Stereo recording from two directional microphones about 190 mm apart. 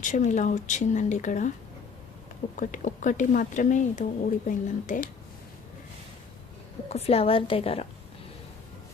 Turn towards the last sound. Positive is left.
turn(degrees=30)  # may be behind; listen again after turning